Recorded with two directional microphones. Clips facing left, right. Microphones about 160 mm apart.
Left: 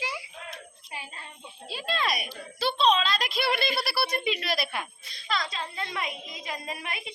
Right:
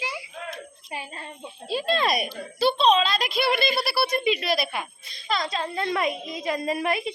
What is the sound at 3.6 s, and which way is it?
Speech, 20° right (ahead or behind).